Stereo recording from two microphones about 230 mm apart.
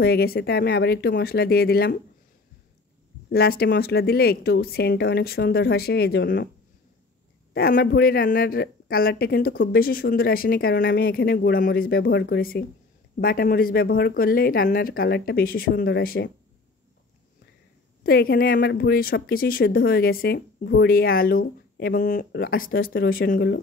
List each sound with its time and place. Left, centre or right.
0.0 s a woman's voice: left
3.3 s a woman's voice: left
7.5 s speech: left
18.0 s speech: left